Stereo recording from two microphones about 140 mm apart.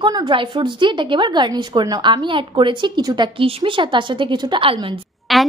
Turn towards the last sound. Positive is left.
turn(degrees=0)  # may be behind; listen again after turning